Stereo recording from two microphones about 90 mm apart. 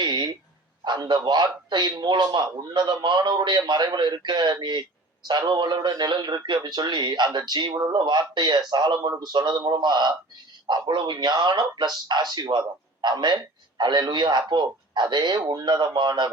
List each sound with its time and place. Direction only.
0.0 s dog: 55° right (ahead or behind)
0.9 s a man's voice: 55° right (ahead or behind)